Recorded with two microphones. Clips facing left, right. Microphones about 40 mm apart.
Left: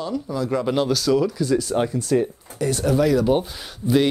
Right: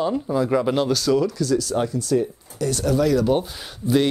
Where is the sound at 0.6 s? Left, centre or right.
Centre.